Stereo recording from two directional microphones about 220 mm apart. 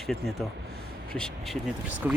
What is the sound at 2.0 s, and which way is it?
Speech, 10° right (ahead or behind).